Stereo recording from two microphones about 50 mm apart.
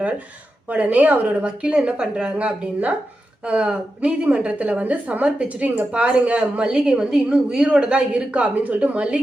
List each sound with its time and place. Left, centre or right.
0.7 s a woman's voice: right